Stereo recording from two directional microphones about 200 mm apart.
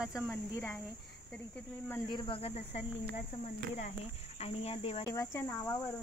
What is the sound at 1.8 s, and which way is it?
Speech, 15° left (ahead or behind).